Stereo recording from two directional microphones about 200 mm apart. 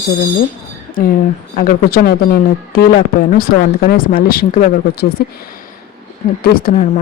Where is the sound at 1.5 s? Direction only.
45° left (ahead or behind).